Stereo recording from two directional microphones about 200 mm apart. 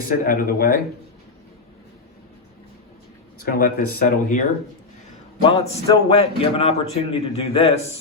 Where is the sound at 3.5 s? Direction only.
45° left (ahead or behind).